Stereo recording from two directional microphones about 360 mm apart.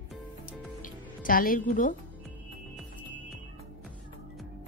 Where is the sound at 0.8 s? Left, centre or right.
Left.